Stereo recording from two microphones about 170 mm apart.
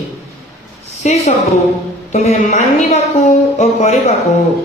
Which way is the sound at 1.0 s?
45° left (ahead or behind).